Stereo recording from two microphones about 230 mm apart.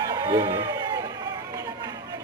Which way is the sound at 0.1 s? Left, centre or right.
Centre.